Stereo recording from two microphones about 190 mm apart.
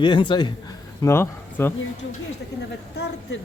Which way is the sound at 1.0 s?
15° left (ahead or behind).